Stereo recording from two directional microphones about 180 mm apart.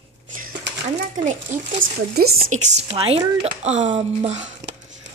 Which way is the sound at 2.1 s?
60° right (ahead or behind).